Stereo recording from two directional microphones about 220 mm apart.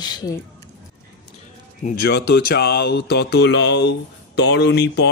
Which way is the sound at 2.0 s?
50° left (ahead or behind).